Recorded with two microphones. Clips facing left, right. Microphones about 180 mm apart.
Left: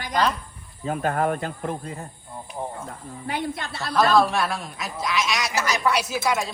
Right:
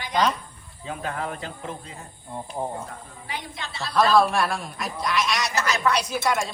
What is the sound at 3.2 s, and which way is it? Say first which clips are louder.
Speech: left 8 dB; 55° left (ahead or behind).